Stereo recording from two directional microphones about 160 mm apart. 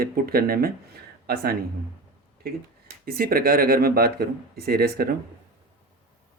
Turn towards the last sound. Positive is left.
turn(degrees=-75)  # may be behind; listen again after turning